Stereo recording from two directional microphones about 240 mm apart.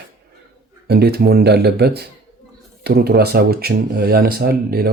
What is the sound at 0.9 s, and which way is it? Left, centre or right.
Speech, right.